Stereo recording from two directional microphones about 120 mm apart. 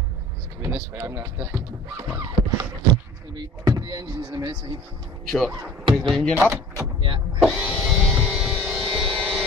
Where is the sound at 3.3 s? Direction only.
35° right (ahead or behind).